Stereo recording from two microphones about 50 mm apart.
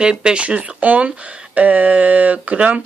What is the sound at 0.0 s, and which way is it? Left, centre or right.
Speech, centre.